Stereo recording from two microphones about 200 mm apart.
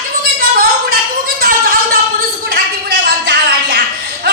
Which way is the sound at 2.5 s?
50° right (ahead or behind).